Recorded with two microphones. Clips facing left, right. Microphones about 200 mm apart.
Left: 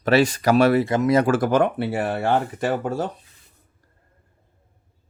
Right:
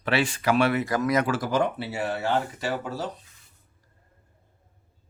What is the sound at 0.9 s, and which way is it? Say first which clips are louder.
Speech: left 5 dB; 25° left (ahead or behind).